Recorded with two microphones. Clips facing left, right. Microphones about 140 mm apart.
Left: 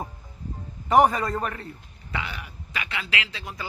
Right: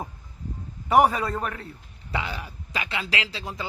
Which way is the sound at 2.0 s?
30° right (ahead or behind).